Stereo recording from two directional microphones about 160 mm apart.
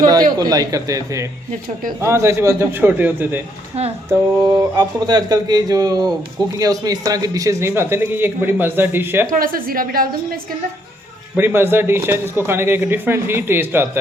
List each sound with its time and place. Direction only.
0.0 s a man's voice: 25° right (ahead or behind)
4.4 s a man's voice: 25° right (ahead or behind)
9.3 s a woman's voice: 60° right (ahead or behind)
11.3 s a man's voice: 15° right (ahead or behind)